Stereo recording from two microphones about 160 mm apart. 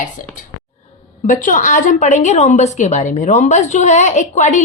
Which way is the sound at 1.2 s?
55° left (ahead or behind).